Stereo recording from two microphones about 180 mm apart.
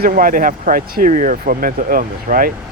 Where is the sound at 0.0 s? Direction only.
50° right (ahead or behind).